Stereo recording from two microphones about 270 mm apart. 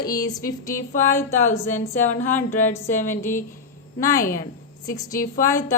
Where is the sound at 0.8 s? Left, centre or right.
Centre.